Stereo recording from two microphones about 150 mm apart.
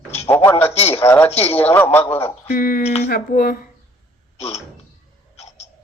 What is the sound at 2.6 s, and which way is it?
Speech, 65° left (ahead or behind).